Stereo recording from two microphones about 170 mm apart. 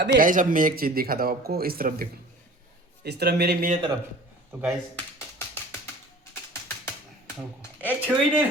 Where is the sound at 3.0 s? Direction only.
70° right (ahead or behind).